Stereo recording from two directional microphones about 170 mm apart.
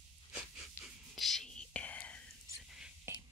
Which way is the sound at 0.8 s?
15° left (ahead or behind).